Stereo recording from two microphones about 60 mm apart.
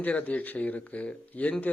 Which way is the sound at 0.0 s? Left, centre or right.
Left.